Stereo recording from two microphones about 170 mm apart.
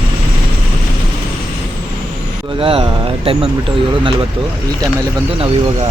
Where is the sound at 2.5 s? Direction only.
30° right (ahead or behind).